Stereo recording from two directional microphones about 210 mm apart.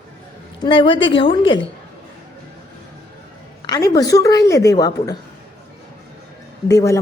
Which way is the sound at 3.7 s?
15° left (ahead or behind).